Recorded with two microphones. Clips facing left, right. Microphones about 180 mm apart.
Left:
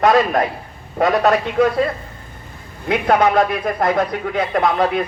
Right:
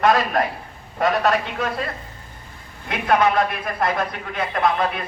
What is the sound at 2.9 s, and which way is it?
Speech, 45° left (ahead or behind).